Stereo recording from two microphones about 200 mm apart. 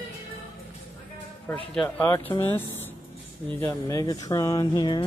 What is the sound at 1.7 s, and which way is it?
Speech, 10° left (ahead or behind).